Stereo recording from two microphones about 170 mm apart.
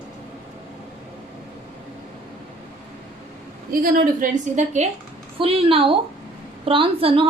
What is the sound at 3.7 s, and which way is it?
A woman's voice, 60° right (ahead or behind).